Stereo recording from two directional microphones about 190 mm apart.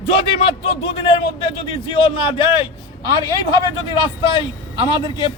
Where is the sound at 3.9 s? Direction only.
25° left (ahead or behind).